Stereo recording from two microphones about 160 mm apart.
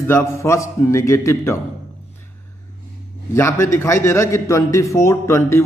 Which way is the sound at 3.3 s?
15° left (ahead or behind).